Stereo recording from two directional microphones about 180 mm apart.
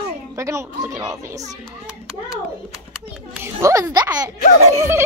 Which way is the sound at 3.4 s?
15° right (ahead or behind).